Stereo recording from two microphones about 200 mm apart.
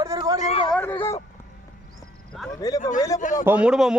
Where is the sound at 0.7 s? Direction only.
10° left (ahead or behind).